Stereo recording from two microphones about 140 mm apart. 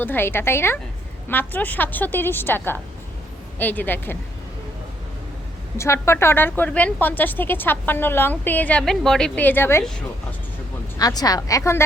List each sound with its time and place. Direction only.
0.0 s a woman's voice: 15° left (ahead or behind)
5.7 s a woman's voice: 20° left (ahead or behind)
10.9 s a woman's voice: 25° left (ahead or behind)